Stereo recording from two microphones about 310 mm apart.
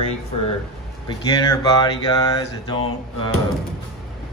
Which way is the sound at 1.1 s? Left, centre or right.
Centre.